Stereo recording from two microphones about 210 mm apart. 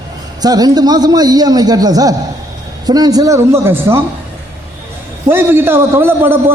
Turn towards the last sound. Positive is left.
turn(degrees=-10)  # may be behind; listen again after turning